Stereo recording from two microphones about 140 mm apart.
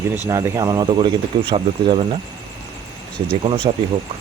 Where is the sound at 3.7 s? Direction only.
40° right (ahead or behind).